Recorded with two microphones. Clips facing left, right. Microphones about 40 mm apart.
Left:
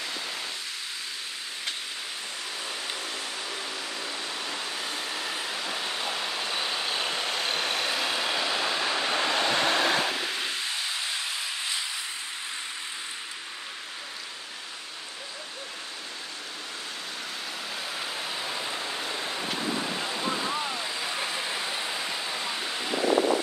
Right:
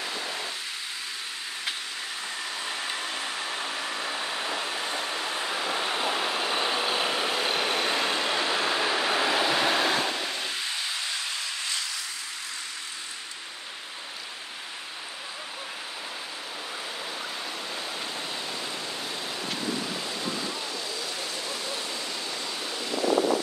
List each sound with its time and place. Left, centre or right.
4.0 s a sound: right
4.8 s train: centre
17.9 s vehicle: centre